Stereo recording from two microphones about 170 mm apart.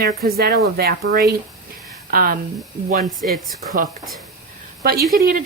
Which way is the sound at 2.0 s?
60° right (ahead or behind).